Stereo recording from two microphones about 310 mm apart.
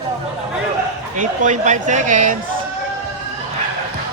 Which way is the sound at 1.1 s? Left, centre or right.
Right.